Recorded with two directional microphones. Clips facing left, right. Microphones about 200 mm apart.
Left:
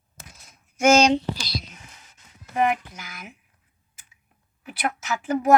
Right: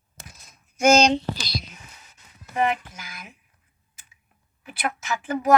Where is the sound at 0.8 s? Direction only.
5° left (ahead or behind).